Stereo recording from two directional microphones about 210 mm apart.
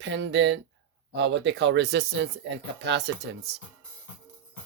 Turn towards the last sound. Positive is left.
turn(degrees=-55)  # may be behind; listen again after turning